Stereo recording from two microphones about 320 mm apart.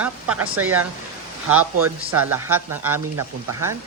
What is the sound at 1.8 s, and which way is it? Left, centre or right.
Speech, centre.